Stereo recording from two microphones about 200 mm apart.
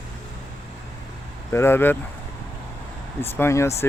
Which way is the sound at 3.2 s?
10° left (ahead or behind).